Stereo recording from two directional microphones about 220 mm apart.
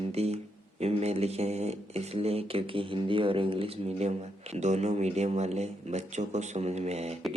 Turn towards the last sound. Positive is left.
turn(degrees=-30)  # may be behind; listen again after turning